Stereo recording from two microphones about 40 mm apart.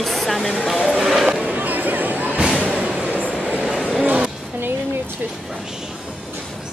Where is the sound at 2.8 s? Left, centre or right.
Right.